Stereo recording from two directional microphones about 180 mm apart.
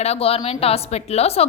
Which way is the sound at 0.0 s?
35° left (ahead or behind).